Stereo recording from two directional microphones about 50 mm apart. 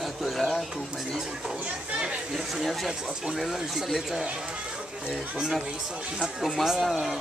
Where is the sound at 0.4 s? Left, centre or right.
Centre.